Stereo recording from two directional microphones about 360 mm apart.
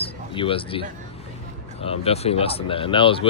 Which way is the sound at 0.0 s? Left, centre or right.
Centre.